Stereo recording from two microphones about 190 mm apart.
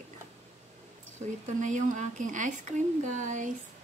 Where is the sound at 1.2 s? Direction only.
40° right (ahead or behind).